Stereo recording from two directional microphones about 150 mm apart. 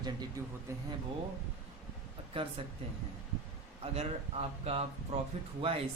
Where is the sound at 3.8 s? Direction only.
45° right (ahead or behind).